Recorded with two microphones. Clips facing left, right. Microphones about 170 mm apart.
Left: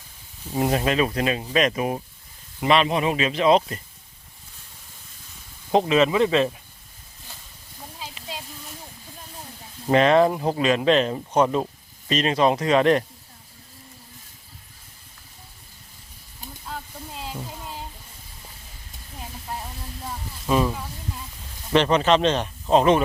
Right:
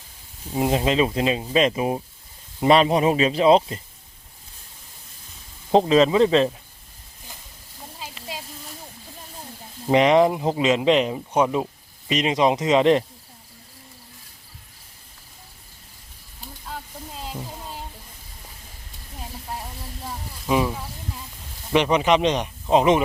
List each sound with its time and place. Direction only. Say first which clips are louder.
0.5 s speech: right 1 dB; 15° right (ahead or behind)
2.6 s speech: right 3 dB; 35° right (ahead or behind)
5.9 s speech: right 3 dB; 30° right (ahead or behind)
7.9 s a sound: even; centre (ahead or behind)
9.9 s speech: right 1 dB; 15° right (ahead or behind)
20.5 s speech: even; 10° right (ahead or behind)